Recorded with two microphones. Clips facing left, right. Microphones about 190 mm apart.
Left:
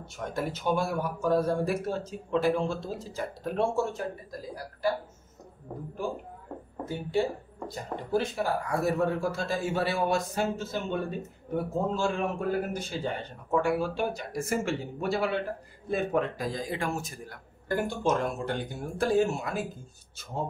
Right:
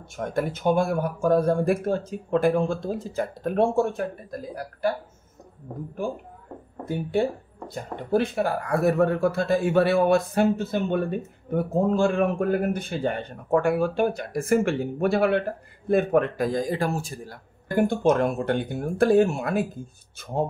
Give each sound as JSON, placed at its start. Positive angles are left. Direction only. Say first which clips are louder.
{"t": 0.3, "sound": "speech", "louder": "right 6 dB", "side_deg": -50}
{"t": 6.9, "sound": "speech", "louder": "right 4 dB", "side_deg": -55}
{"t": 17.7, "sound": "speech", "louder": "right 7 dB", "side_deg": -55}